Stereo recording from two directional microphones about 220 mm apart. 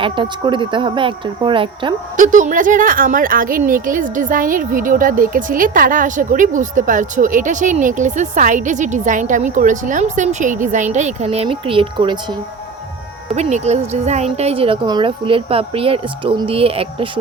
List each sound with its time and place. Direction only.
0.0 s a woman's voice: 20° right (ahead or behind)
2.1 s a woman's voice: 35° right (ahead or behind)
13.3 s a woman's voice: 30° right (ahead or behind)